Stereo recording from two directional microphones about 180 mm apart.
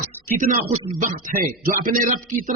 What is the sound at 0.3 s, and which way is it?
A man's voice, 50° right (ahead or behind).